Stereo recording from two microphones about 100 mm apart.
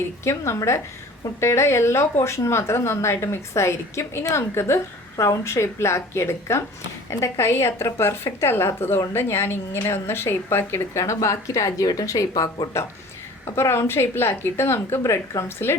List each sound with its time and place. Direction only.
0.3 s a woman's voice: 30° left (ahead or behind)
13.6 s speech: 25° left (ahead or behind)